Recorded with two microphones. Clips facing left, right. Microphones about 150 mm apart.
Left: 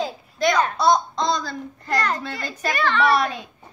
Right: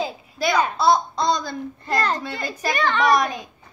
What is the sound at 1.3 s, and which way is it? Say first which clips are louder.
Child singing: right 2 dB; 20° right (ahead or behind).